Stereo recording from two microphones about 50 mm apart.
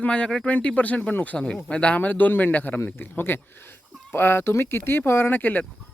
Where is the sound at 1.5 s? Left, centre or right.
Centre; by 2.7 s left.